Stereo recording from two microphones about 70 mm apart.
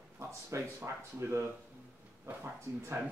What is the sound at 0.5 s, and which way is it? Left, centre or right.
Speech, right.